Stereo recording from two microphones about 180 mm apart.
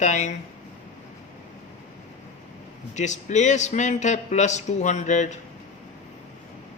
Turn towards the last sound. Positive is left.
turn(degrees=40)  # may be behind; listen again after turning